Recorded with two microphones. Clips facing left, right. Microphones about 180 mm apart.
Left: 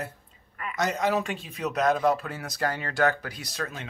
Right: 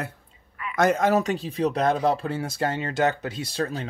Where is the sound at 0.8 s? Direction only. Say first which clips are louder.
Right 6 dB; 50° right (ahead or behind).